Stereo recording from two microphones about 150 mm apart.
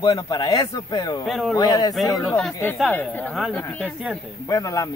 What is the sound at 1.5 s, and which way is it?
Speech, 25° left (ahead or behind).